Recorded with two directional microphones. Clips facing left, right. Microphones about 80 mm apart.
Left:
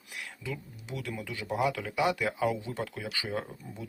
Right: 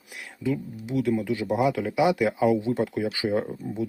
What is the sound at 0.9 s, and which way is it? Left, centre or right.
Speech, centre.